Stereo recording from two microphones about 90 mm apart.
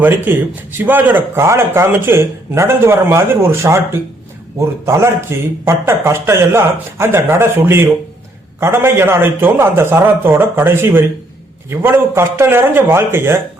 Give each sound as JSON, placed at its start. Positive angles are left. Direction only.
{"t": 0.0, "sound": "a man's voice", "side_deg": -25}
{"t": 4.9, "sound": "a man's voice", "side_deg": -30}